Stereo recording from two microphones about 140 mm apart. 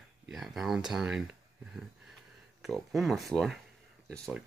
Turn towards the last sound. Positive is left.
turn(degrees=0)  # may be behind; listen again after turning